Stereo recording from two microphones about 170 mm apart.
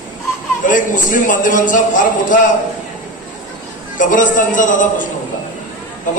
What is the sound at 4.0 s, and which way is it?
A man's voice, 50° left (ahead or behind).